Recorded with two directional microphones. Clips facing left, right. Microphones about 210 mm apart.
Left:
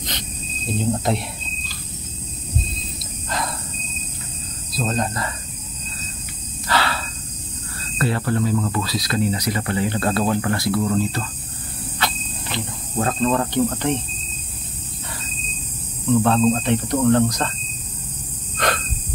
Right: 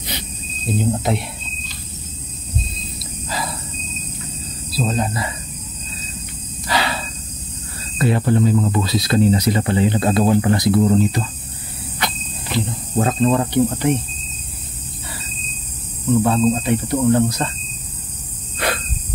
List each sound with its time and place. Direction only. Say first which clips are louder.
0.7 s speech: right 1 dB; centre (ahead or behind)
3.3 s a sound: even; 5° right (ahead or behind)
4.7 s speech: right 2 dB; 5° right (ahead or behind)
6.7 s snort: right 1 dB; 15° right (ahead or behind)
8.0 s speech: right 5 dB; 15° right (ahead or behind)
12.9 s speech: right 3 dB; 20° right (ahead or behind)
16.2 s speech: right 1 dB; 10° right (ahead or behind)
18.6 s a sound: even; 10° right (ahead or behind)